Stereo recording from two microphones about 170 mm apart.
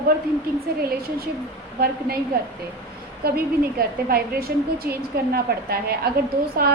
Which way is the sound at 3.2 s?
65° right (ahead or behind).